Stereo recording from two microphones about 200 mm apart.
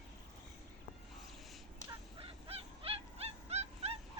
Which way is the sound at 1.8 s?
30° right (ahead or behind).